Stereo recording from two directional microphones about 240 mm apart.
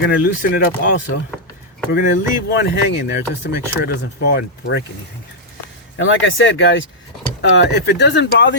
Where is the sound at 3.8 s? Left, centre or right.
Left.